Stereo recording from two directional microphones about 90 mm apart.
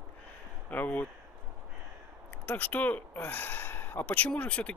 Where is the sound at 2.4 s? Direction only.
20° left (ahead or behind).